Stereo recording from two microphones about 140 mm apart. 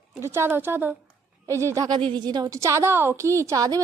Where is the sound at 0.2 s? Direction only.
20° right (ahead or behind).